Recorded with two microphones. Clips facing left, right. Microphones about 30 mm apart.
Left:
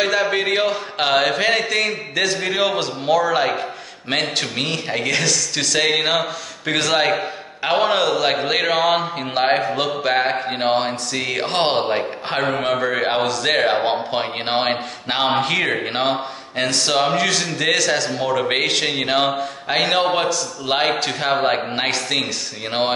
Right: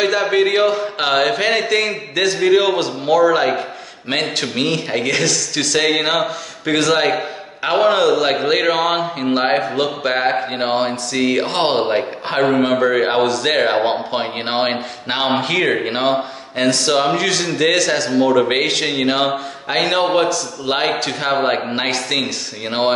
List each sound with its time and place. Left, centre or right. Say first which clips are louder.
0.0 s speech: right 3 dB; centre